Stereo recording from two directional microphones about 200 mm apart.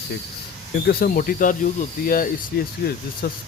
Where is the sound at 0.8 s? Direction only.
45° left (ahead or behind).